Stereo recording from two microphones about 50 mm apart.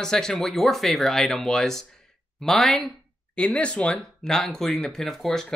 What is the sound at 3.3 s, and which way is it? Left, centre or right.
Speech, left.